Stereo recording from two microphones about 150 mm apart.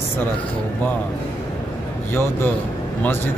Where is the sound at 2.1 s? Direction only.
15° left (ahead or behind).